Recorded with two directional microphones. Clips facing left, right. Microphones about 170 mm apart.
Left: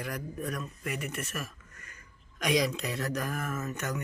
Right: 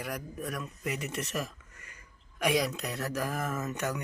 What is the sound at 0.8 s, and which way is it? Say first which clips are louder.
Speech: right 2 dB; 25° right (ahead or behind).